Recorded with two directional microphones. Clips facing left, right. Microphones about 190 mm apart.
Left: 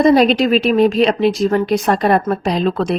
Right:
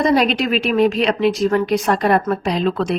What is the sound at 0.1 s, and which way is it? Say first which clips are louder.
A woman's voice: left 5 dB; 30° left (ahead or behind).